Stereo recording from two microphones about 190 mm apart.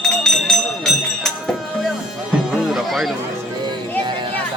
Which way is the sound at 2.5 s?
Centre (ahead or behind).